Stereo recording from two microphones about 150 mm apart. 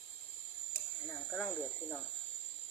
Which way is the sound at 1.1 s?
Centre (ahead or behind).